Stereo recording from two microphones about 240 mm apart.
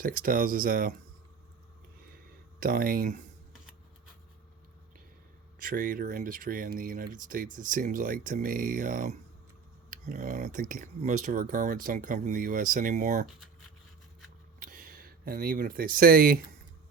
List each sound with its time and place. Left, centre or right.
0.0 s speech: right
2.6 s speech: right
5.5 s speech: right
14.6 s speech: right